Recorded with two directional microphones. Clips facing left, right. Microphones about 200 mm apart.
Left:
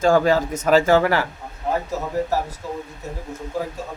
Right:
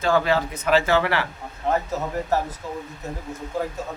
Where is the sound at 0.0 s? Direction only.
45° left (ahead or behind).